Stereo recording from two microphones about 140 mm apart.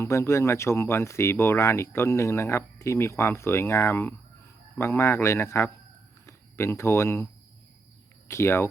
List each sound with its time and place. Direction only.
0.0 s speech: 20° left (ahead or behind)
8.3 s speech: 20° left (ahead or behind)